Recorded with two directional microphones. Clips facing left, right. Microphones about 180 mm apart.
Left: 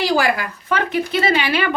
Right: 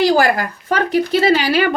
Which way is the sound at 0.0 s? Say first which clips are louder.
Right 4 dB; 45° right (ahead or behind).